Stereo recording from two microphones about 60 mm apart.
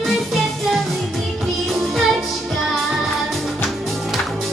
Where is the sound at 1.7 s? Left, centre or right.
Centre.